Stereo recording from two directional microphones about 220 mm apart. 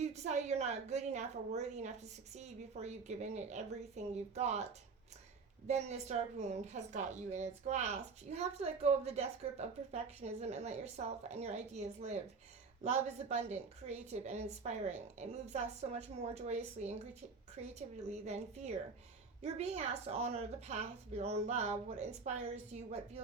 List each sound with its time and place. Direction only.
0.0 s a woman's voice: 30° right (ahead or behind)
5.6 s a woman's voice: 30° right (ahead or behind)